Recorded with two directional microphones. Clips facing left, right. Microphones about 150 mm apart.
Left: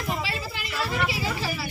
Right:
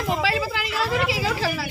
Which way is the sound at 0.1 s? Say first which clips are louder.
Right 8 dB; 90° right.